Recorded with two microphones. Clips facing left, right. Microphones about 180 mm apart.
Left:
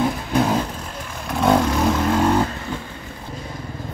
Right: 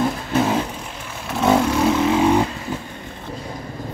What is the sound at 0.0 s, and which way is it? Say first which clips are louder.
Vehicle: even; 5° right (ahead or behind).